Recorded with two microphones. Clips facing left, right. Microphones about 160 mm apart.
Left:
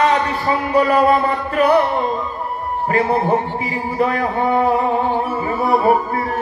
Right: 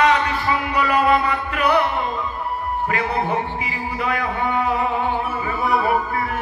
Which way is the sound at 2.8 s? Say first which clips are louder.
Left 7 dB; 35° left (ahead or behind).